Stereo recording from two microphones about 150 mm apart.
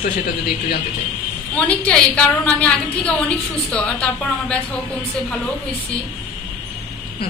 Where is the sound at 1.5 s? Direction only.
10° left (ahead or behind).